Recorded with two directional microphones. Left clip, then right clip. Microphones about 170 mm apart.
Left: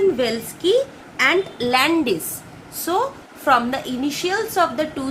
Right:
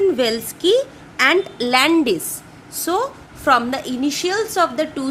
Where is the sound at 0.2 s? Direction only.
90° right; by 2.1 s 65° right (ahead or behind).